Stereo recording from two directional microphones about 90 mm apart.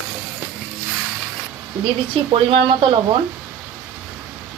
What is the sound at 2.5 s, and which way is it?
Speech, 70° right (ahead or behind).